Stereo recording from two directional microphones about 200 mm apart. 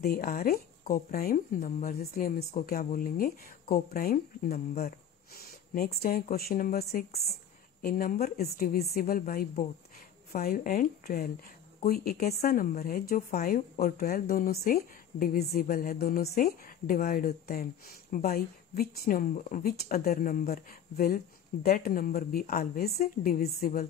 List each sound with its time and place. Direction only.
0.0 s speech: 45° left (ahead or behind)